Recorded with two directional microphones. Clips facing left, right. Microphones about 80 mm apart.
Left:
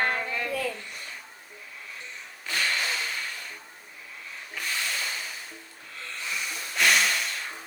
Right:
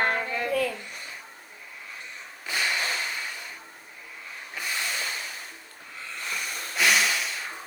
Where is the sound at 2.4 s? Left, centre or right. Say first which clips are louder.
Even; centre.